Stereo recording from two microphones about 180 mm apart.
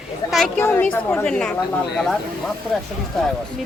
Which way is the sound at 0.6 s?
10° left (ahead or behind).